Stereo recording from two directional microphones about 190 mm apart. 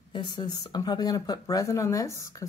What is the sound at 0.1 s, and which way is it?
Speech, 25° left (ahead or behind).